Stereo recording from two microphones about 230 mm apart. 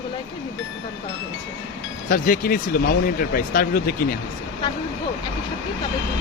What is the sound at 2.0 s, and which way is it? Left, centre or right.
Speech, left.